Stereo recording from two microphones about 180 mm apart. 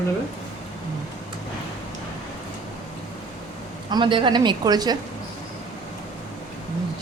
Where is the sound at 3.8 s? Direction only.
25° right (ahead or behind).